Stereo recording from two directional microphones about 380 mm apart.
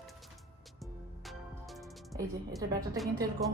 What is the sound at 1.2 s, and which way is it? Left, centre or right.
A woman's voice, centre.